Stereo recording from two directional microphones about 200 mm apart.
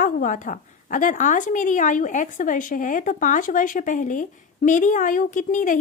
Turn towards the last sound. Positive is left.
turn(degrees=40)  # may be behind; listen again after turning